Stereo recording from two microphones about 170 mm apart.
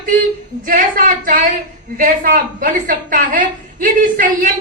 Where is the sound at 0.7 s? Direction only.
55° right (ahead or behind).